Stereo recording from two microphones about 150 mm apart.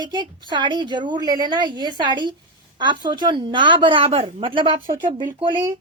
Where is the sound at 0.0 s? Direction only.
30° right (ahead or behind).